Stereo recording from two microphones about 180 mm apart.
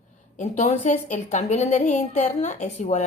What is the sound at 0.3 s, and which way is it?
A woman's voice, 40° left (ahead or behind).